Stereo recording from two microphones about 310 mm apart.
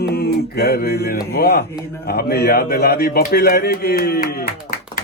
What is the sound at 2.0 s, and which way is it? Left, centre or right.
A man's voice, left.